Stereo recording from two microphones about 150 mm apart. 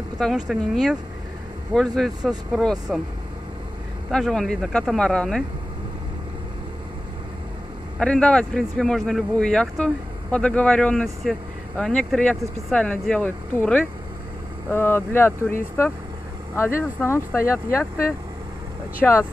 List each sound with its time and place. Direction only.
0.2 s speech: 5° right (ahead or behind)
4.1 s speech: centre (ahead or behind)
8.0 s speech: 5° left (ahead or behind)
19.0 s speech: 5° left (ahead or behind)